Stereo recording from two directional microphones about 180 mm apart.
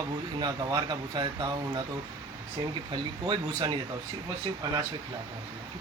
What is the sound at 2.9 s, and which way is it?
Speech, 25° right (ahead or behind).